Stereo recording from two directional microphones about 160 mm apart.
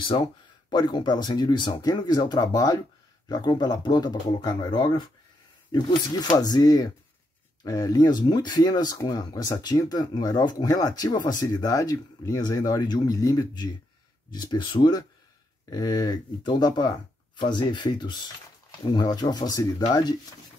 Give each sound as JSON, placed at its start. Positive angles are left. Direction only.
{"t": 0.7, "sound": "speech", "side_deg": 30}